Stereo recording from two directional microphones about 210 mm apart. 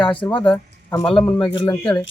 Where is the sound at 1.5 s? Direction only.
25° left (ahead or behind).